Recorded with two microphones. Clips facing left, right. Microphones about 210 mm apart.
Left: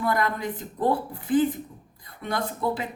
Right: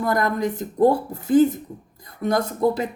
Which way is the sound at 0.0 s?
45° right (ahead or behind).